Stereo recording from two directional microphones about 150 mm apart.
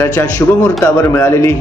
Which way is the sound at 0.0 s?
15° left (ahead or behind).